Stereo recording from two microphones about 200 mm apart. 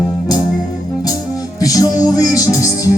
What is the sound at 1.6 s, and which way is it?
Music, 15° left (ahead or behind).